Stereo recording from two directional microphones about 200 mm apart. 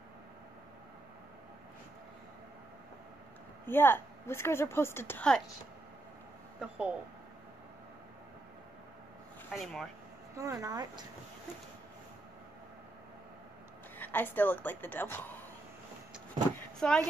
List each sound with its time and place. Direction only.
3.6 s a woman's voice: 10° left (ahead or behind)
6.6 s speech: 5° right (ahead or behind)
9.5 s speech: centre (ahead or behind)
10.3 s speech: 15° right (ahead or behind)
13.9 s a woman's voice: 10° left (ahead or behind)
16.8 s speech: 5° left (ahead or behind)